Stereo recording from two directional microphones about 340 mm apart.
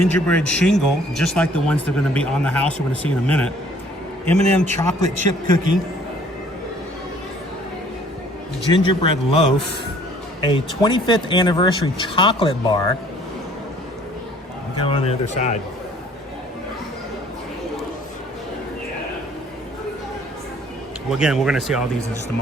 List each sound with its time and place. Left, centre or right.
0.1 s speech: centre
8.7 s speech: centre
14.8 s speech: centre
21.1 s speech: centre